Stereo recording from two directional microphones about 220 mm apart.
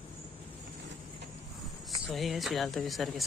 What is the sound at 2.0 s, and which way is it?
Speech, centre (ahead or behind).